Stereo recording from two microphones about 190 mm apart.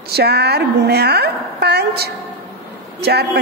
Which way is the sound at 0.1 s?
60° right (ahead or behind).